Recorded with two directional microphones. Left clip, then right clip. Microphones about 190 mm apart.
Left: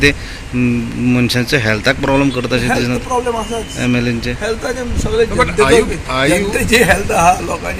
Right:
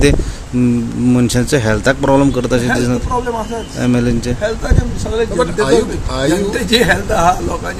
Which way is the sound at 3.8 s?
20° right (ahead or behind).